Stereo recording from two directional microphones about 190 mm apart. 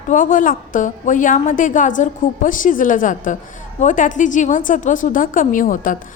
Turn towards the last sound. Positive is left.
turn(degrees=45)  # may be behind; listen again after turning